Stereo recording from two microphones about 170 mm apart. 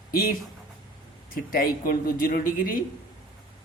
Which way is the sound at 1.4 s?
55° left (ahead or behind).